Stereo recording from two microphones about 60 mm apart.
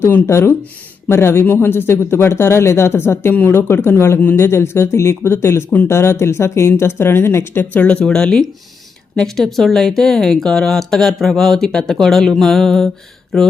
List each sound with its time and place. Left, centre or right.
0.3 s a man's voice: left
3.3 s speech: left
3.6 s a man's voice: left
7.6 s speech: left
7.9 s speech: centre